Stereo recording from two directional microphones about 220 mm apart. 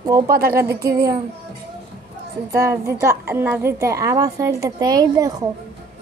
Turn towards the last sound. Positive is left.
turn(degrees=-15)  # may be behind; listen again after turning